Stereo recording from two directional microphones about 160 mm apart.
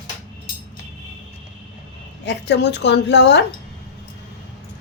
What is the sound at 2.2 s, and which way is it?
A woman's voice, 90° left.